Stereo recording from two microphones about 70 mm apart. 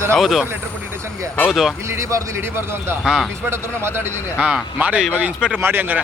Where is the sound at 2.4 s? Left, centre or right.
Right.